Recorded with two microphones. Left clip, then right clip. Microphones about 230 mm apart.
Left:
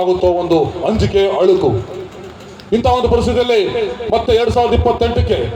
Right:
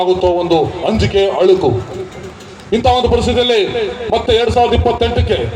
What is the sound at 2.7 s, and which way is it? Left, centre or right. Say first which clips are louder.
A man's voice: right 1 dB; left.